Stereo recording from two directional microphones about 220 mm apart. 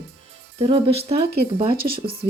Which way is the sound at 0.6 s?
25° right (ahead or behind).